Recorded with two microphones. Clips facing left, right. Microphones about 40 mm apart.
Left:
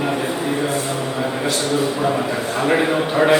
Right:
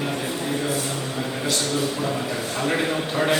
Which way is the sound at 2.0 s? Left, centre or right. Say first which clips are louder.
Left 6 dB; left.